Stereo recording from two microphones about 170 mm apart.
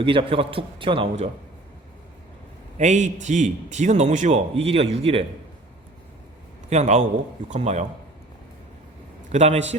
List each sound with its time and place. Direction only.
0.0 s a man's voice: 30° right (ahead or behind)
2.7 s a man's voice: 45° right (ahead or behind)
6.7 s a man's voice: 40° right (ahead or behind)
9.3 s a man's voice: 40° right (ahead or behind)